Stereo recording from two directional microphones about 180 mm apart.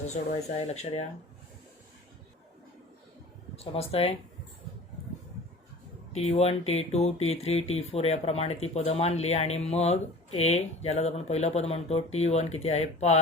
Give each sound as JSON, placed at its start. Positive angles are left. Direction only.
{"t": 0.0, "sound": "speech", "side_deg": 40}
{"t": 3.5, "sound": "speech", "side_deg": 35}
{"t": 6.1, "sound": "speech", "side_deg": 35}